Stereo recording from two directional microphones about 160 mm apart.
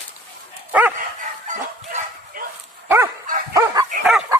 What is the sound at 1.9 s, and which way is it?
Bow-wow, 60° right (ahead or behind).